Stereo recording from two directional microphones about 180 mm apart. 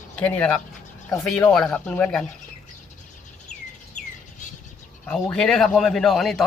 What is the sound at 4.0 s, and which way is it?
Bird, 40° left (ahead or behind).